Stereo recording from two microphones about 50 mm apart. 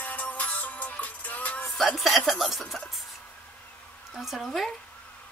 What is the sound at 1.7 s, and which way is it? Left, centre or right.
Speech, centre.